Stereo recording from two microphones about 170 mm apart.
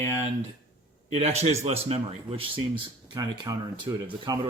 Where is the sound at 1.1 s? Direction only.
40° right (ahead or behind).